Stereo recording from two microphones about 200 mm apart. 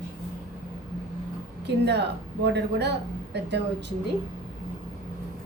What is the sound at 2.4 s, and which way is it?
Speech, 55° right (ahead or behind).